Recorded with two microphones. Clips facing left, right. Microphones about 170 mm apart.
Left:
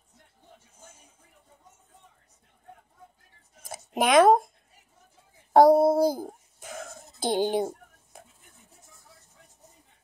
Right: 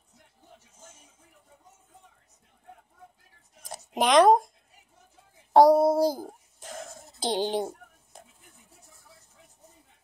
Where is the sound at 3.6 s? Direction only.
5° left (ahead or behind).